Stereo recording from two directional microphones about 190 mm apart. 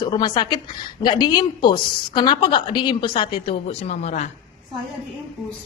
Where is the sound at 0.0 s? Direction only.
20° left (ahead or behind).